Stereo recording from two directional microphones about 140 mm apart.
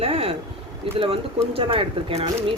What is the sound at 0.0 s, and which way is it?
Speech, 45° right (ahead or behind).